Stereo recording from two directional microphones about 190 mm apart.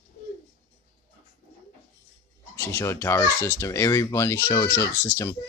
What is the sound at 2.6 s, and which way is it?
A child's voice, 15° left (ahead or behind).